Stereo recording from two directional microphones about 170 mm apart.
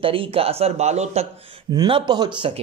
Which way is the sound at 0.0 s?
30° right (ahead or behind).